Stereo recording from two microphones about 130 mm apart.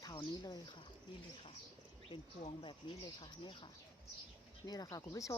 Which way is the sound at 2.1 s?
40° left (ahead or behind).